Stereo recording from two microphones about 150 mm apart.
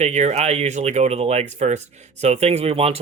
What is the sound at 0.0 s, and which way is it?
Speech, 50° right (ahead or behind).